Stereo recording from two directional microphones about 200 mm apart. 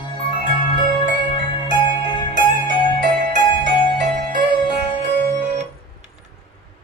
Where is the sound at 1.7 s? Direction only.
25° left (ahead or behind).